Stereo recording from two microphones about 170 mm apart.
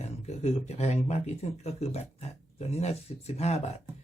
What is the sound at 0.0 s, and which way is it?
Speech, 40° left (ahead or behind).